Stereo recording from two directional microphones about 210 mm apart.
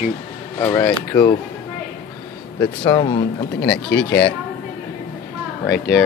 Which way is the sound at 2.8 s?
25° left (ahead or behind).